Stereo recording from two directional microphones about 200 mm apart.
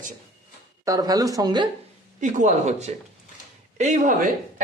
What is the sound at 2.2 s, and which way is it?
Speech, 35° right (ahead or behind).